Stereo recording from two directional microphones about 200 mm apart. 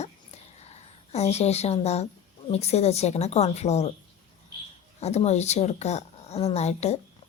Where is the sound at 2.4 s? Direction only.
30° left (ahead or behind).